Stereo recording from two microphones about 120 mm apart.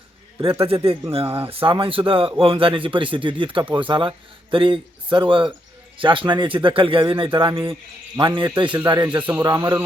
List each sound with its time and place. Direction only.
0.6 s speech: 50° right (ahead or behind); by 9.8 s 25° right (ahead or behind)